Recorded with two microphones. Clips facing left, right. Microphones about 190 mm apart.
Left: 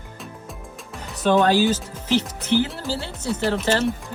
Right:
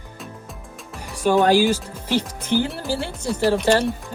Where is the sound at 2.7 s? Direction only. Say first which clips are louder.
Right 3 dB; 10° right (ahead or behind).